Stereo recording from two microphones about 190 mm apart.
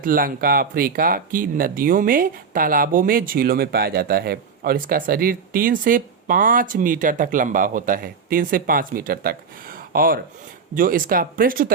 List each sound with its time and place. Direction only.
0.0 s speech: 50° right (ahead or behind)